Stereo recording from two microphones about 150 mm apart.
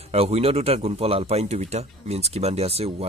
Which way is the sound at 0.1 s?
45° right (ahead or behind).